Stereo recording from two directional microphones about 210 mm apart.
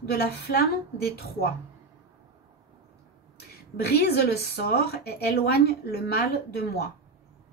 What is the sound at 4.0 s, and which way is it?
Speech, 45° left (ahead or behind).